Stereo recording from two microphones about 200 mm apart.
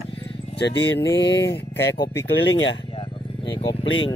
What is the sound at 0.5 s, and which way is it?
Speech, 60° left (ahead or behind).